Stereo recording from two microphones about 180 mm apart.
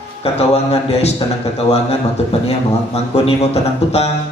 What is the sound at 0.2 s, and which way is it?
A man's voice, 35° left (ahead or behind).